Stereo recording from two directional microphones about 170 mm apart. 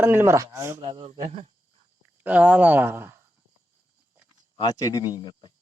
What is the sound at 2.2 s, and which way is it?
Speech, 10° right (ahead or behind).